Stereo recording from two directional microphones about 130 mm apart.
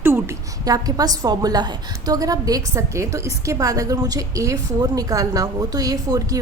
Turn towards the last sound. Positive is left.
turn(degrees=-30)  # may be behind; listen again after turning